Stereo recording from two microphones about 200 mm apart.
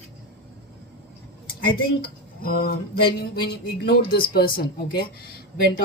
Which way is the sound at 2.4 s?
50° left (ahead or behind).